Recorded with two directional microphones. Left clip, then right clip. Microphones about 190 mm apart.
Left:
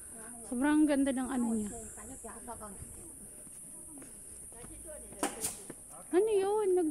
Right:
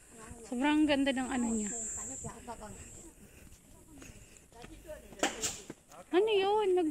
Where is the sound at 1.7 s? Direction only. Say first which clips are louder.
Right 5 dB; 5° left (ahead or behind).